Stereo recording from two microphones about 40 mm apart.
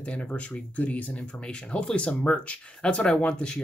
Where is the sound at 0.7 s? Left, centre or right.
Left.